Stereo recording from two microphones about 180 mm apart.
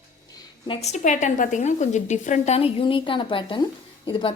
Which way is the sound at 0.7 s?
35° left (ahead or behind).